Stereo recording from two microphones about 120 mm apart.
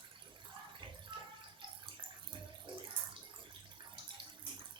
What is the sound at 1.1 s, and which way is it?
Drip, 45° right (ahead or behind).